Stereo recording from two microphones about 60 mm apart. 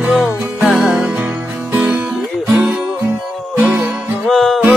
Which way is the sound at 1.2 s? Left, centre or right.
Right.